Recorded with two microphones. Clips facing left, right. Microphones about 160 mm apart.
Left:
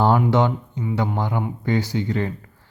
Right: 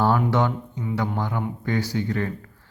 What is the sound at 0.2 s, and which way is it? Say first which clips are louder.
A man's voice: left 3 dB; 20° left (ahead or behind).